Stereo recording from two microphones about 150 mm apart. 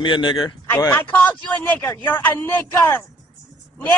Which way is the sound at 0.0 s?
30° left (ahead or behind).